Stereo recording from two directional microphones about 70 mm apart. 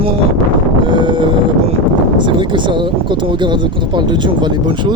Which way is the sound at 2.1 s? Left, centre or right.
Right.